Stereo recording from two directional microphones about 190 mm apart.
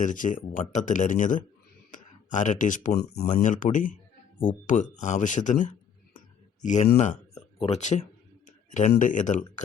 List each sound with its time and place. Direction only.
0.0 s speech: 40° left (ahead or behind)
3.2 s speech: 40° left (ahead or behind)